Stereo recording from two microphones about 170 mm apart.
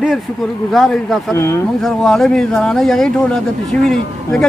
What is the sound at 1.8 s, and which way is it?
A man's voice, centre (ahead or behind).